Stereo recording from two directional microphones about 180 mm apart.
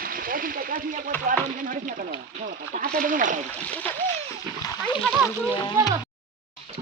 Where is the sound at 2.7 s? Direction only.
50° right (ahead or behind).